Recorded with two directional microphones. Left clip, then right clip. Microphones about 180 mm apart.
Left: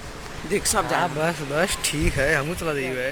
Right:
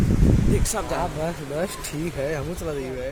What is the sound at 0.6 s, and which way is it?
Speech, 30° left (ahead or behind).